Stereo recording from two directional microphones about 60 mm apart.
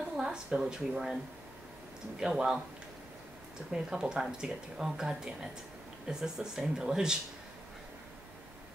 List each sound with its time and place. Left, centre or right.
0.2 s speech: centre
3.7 s speech: centre